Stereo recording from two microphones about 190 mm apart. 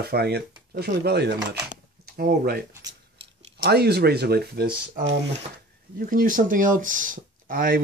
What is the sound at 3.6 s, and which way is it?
Speech, 55° right (ahead or behind).